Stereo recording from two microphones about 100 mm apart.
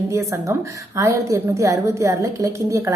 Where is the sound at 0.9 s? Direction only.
30° right (ahead or behind).